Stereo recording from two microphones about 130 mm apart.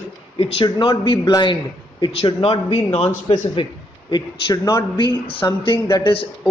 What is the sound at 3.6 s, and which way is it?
A man's voice, 40° left (ahead or behind).